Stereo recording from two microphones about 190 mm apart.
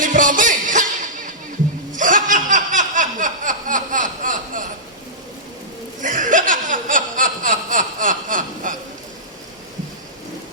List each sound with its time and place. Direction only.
0.0 s music: 45° right (ahead or behind)
1.9 s chuckle: 45° right (ahead or behind)
6.0 s chuckle: 45° right (ahead or behind)